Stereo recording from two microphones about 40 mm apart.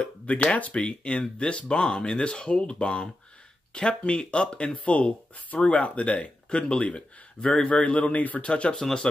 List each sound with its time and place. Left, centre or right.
0.0 s speech: left; by 7.7 s centre
7.7 s speech: left
8.5 s speech: left